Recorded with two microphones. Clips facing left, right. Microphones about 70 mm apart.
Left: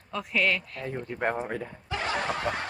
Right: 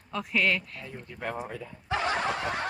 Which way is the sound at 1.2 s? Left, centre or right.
Left.